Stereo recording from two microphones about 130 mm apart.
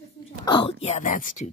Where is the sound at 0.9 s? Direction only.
90° left.